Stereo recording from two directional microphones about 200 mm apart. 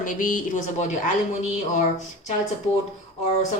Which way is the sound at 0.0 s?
40° left (ahead or behind).